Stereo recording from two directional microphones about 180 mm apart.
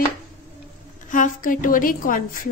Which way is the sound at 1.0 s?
45° left (ahead or behind).